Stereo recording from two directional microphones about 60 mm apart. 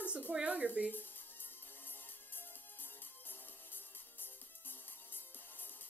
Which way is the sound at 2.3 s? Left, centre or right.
Left.